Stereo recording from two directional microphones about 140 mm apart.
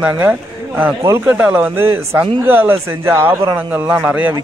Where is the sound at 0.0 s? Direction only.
10° right (ahead or behind).